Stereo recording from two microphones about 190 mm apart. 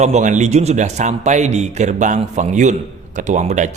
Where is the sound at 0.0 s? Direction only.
40° right (ahead or behind).